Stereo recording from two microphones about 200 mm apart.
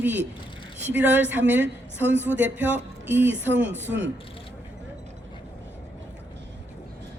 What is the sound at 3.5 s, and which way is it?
Speech, 60° right (ahead or behind).